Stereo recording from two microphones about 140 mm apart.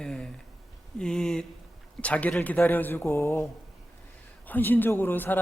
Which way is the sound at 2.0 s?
10° left (ahead or behind).